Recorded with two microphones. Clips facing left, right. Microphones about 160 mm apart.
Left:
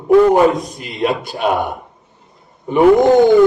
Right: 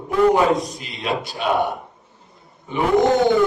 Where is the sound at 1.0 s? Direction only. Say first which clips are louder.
Left 7 dB; 50° left (ahead or behind).